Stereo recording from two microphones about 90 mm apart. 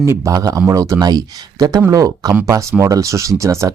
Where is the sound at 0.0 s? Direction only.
30° right (ahead or behind).